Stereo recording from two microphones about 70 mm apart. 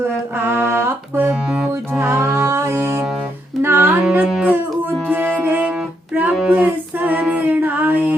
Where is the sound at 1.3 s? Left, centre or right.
Centre.